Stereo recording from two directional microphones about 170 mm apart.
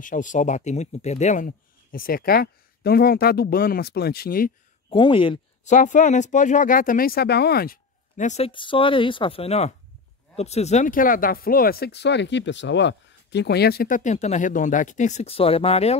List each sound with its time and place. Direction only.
0.0 s speech: 50° left (ahead or behind)
4.8 s speech: 30° left (ahead or behind)
5.7 s speech: 45° left (ahead or behind)
8.5 s speech: 30° left (ahead or behind)